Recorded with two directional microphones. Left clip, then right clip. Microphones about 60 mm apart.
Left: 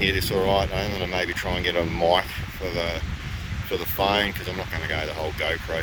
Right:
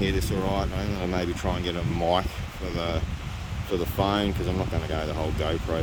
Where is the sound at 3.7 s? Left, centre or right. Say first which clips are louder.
Left 3 dB; centre.